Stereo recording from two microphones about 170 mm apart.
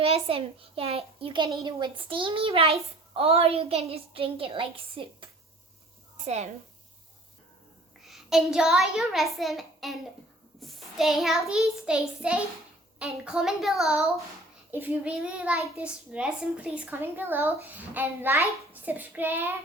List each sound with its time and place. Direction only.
0.0 s a woman's voice: 35° right (ahead or behind)
8.0 s a child's voice: centre (ahead or behind)
10.6 s child singing: centre (ahead or behind)
14.7 s a child's voice: 10° right (ahead or behind)